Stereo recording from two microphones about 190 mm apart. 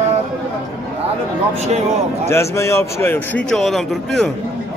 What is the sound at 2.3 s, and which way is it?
A man's voice, 15° left (ahead or behind).